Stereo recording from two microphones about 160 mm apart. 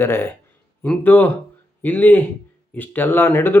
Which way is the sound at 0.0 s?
15° left (ahead or behind).